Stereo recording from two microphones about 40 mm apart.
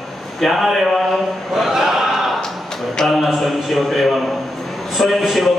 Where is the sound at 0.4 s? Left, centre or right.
Centre.